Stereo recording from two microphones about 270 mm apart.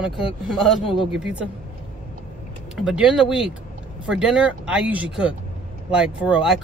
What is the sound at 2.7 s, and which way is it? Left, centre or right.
Speech, centre.